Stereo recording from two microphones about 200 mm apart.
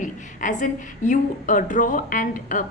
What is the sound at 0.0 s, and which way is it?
A woman's voice, 40° left (ahead or behind).